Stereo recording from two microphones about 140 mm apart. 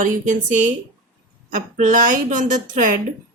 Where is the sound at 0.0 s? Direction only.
65° right (ahead or behind).